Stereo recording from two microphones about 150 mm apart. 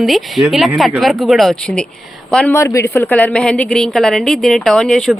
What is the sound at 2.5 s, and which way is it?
Speech, 20° left (ahead or behind).